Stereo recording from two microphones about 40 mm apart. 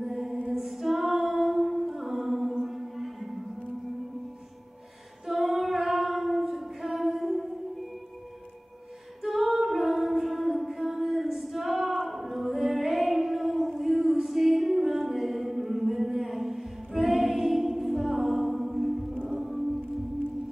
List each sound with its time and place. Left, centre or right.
0.0 s music: centre
0.5 s female singing: centre
2.6 s music: centre
5.2 s female singing: centre
9.2 s female singing: centre
19.2 s music: centre